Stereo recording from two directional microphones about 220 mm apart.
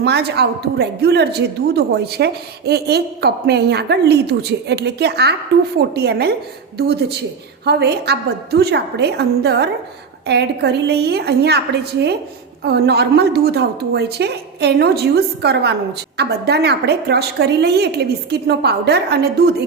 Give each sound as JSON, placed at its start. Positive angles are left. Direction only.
{"t": 0.0, "sound": "a woman's voice", "side_deg": -50}